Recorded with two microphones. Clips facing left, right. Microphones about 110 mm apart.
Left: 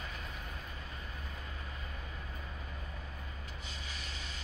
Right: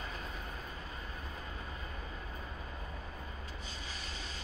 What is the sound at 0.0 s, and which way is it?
Vehicle, 30° right (ahead or behind).